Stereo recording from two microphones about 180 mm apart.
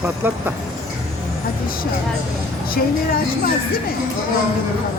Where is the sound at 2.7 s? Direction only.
55° left (ahead or behind).